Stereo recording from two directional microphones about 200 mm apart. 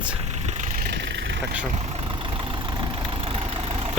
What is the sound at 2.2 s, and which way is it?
Vehicle, 25° right (ahead or behind).